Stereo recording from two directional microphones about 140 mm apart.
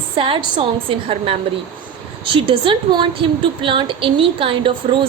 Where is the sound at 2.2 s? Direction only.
40° right (ahead or behind).